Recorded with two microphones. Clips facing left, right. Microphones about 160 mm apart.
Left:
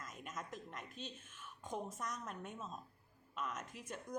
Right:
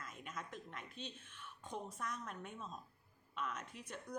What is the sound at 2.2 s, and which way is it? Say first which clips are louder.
A woman's voice: left 1 dB; centre (ahead or behind).